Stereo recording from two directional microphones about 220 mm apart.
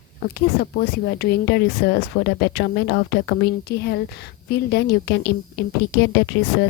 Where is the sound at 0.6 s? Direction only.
45° left (ahead or behind).